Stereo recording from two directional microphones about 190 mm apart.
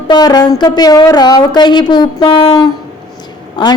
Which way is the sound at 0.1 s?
20° left (ahead or behind).